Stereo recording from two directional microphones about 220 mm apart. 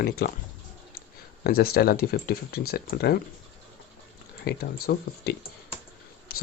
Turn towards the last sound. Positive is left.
turn(degrees=45)  # may be behind; listen again after turning